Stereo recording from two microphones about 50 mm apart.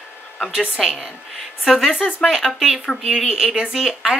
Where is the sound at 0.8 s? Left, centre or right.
Centre.